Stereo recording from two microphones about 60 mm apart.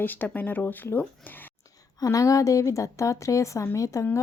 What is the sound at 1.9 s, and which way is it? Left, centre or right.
A woman's voice, left.